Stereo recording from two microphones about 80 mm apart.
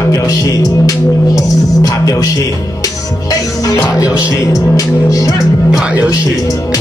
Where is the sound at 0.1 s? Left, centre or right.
Left.